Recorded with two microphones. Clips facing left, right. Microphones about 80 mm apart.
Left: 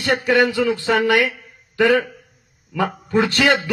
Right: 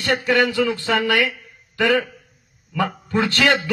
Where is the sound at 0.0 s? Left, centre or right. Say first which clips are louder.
Left 2 dB; centre.